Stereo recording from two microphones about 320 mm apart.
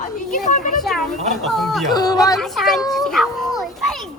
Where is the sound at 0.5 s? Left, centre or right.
Left.